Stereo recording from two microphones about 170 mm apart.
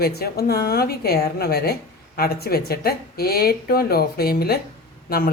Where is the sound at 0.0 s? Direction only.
70° left (ahead or behind).